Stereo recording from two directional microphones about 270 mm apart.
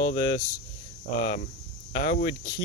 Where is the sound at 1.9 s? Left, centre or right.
Left.